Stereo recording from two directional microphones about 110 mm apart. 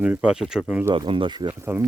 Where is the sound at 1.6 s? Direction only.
20° right (ahead or behind).